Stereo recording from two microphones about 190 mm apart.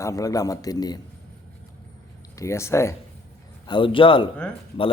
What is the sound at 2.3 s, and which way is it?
Speech, 15° left (ahead or behind).